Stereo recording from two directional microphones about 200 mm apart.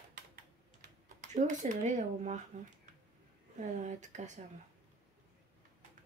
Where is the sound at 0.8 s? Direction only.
35° right (ahead or behind).